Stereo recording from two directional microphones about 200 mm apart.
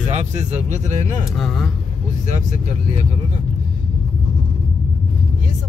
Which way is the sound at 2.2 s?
35° right (ahead or behind).